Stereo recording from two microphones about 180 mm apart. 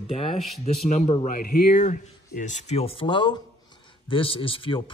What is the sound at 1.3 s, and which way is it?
Speech, 55° left (ahead or behind).